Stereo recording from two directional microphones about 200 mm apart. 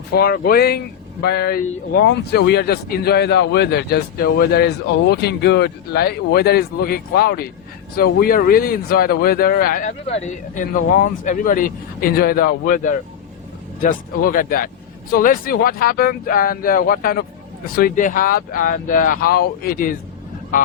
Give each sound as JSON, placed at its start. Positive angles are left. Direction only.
{"t": 0.1, "sound": "a man's voice", "side_deg": 50}